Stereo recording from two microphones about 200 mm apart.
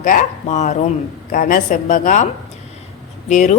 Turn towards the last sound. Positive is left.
turn(degrees=35)  # may be behind; listen again after turning